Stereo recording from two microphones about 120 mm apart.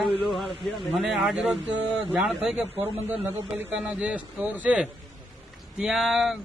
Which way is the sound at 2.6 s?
15° right (ahead or behind).